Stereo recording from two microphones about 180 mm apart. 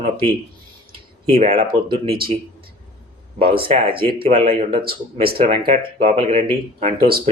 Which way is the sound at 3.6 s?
30° right (ahead or behind).